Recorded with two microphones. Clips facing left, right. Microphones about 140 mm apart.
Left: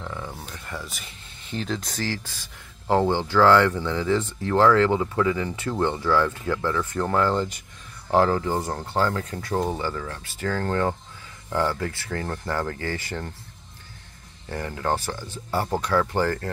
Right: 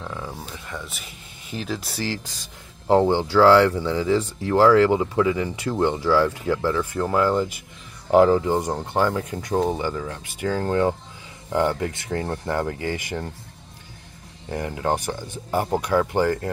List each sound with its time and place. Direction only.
0.0 s speech: 5° right (ahead or behind)
14.5 s speech: 15° right (ahead or behind)